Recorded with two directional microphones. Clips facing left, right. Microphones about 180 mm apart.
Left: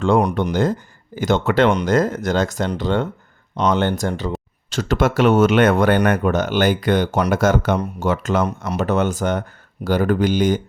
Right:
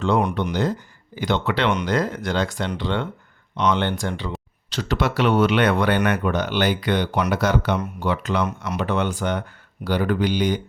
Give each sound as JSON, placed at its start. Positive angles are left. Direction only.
{"t": 0.0, "sound": "speech", "side_deg": 45}